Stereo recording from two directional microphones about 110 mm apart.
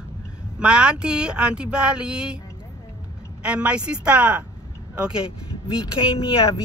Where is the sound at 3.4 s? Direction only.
10° right (ahead or behind).